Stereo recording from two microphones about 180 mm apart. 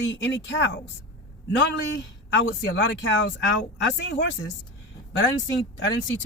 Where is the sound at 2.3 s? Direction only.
90° left.